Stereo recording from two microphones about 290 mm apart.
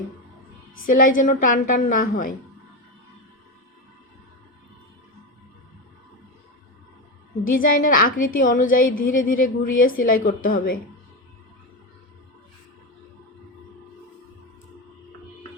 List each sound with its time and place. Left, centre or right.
0.9 s a woman's voice: left
7.4 s a woman's voice: left